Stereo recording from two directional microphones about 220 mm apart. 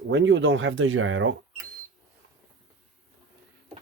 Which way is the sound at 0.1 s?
55° right (ahead or behind).